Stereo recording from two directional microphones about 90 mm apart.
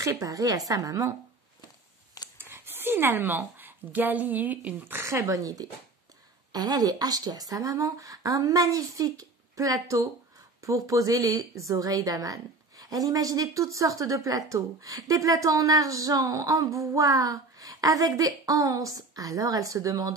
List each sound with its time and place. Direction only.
0.0 s a woman's voice: 40° right (ahead or behind)
2.3 s a woman's voice: 25° right (ahead or behind)